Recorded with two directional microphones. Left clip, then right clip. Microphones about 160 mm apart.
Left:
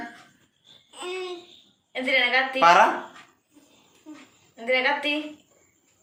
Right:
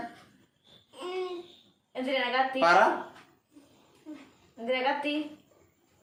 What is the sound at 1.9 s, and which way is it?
Speech, 20° right (ahead or behind).